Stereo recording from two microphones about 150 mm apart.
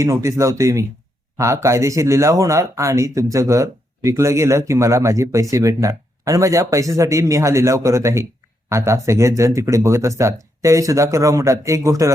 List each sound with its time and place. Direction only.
0.0 s speech: 20° right (ahead or behind)